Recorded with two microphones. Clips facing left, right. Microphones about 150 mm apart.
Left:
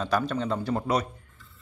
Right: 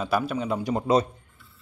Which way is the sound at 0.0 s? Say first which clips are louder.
Right 1 dB; 10° right (ahead or behind).